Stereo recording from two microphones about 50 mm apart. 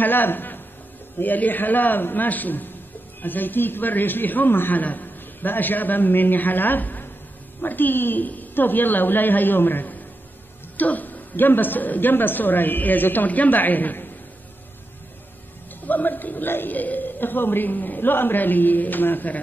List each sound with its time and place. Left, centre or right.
0.0 s a man's voice: left
15.9 s a man's voice: left